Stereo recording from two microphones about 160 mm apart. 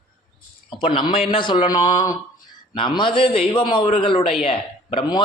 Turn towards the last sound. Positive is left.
turn(degrees=35)  # may be behind; listen again after turning